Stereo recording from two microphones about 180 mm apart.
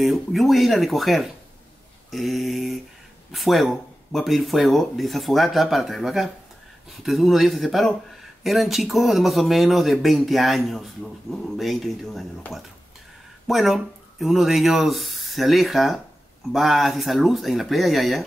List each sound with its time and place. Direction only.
0.0 s speech: centre (ahead or behind)